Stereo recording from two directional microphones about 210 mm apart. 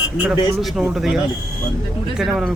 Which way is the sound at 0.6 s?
Centre (ahead or behind).